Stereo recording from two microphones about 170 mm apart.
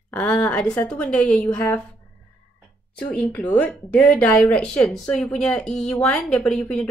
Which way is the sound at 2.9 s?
5° left (ahead or behind).